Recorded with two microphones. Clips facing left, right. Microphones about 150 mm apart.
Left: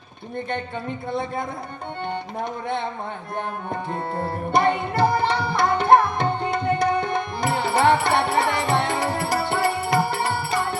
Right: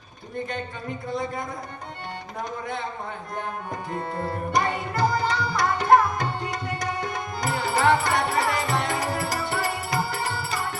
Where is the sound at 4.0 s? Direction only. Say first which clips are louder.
Left 2 dB; 35° left (ahead or behind).